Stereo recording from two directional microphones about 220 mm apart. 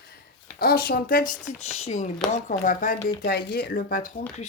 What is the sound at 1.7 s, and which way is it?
Speech, 30° left (ahead or behind).